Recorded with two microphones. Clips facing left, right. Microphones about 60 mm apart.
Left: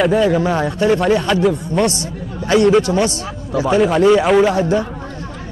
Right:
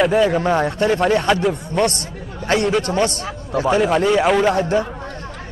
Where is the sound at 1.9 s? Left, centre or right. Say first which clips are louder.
Left 4 dB; right.